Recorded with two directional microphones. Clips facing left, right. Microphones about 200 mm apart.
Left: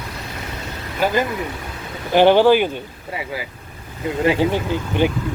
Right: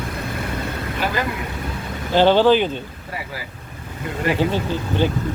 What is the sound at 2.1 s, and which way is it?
Speech, 15° left (ahead or behind).